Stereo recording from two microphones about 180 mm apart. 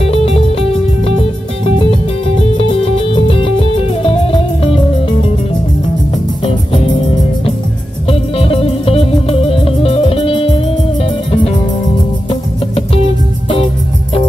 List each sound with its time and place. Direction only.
0.0 s music: 30° left (ahead or behind)
6.4 s music: 30° left (ahead or behind)